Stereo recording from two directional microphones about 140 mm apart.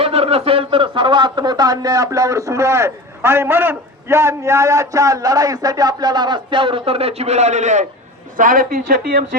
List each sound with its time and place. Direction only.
0.0 s speech: 45° right (ahead or behind)
8.4 s speech: 75° right (ahead or behind)